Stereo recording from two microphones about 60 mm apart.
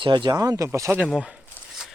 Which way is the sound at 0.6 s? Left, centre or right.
Right.